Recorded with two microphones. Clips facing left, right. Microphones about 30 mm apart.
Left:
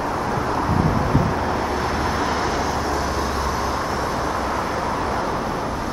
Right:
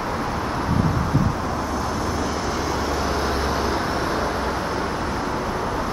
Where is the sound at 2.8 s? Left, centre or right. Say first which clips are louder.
Left 1 dB; centre.